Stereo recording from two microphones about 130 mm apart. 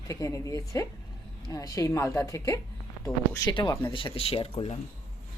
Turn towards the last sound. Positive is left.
turn(degrees=45)  # may be behind; listen again after turning